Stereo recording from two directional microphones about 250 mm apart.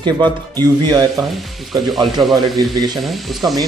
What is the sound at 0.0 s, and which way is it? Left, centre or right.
Speech, centre.